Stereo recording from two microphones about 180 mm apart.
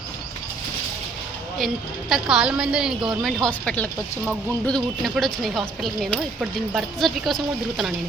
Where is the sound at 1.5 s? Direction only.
Centre (ahead or behind).